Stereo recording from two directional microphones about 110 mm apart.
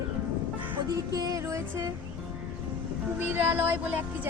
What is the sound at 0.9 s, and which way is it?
Music, 35° right (ahead or behind).